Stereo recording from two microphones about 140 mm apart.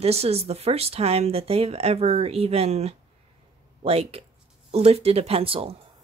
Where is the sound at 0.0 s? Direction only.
45° right (ahead or behind).